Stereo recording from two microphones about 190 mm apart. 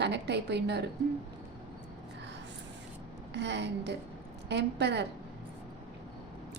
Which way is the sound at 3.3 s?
65° right (ahead or behind).